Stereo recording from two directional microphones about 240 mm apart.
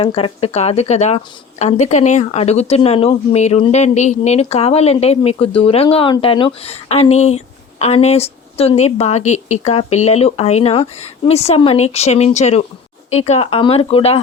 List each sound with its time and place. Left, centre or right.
0.0 s a woman's voice: left